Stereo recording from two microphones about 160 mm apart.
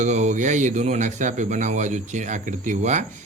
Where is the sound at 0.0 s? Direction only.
50° right (ahead or behind).